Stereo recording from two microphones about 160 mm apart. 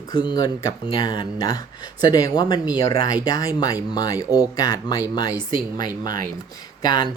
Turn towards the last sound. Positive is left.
turn(degrees=25)  # may be behind; listen again after turning